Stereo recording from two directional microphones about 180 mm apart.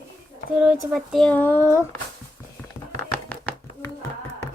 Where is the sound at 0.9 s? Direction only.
Centre (ahead or behind).